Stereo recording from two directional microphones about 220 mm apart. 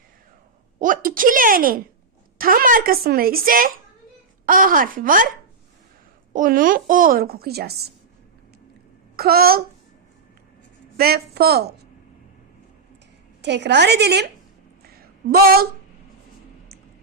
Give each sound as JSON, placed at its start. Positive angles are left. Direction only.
{"t": 0.8, "sound": "a child's voice", "side_deg": -40}
{"t": 6.3, "sound": "a child's voice", "side_deg": -40}
{"t": 9.1, "sound": "a woman's voice", "side_deg": -45}
{"t": 10.9, "sound": "a woman's voice", "side_deg": -45}
{"t": 13.4, "sound": "a woman's voice", "side_deg": -50}
{"t": 15.3, "sound": "a woman's voice", "side_deg": -45}